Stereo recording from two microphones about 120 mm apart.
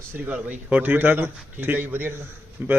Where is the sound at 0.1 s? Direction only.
15° right (ahead or behind).